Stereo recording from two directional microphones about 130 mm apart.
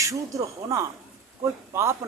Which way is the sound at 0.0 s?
25° right (ahead or behind).